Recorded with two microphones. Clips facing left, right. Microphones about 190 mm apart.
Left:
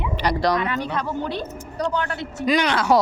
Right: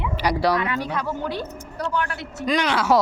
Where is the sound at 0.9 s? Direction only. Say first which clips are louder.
Left 1 dB; 20° left (ahead or behind).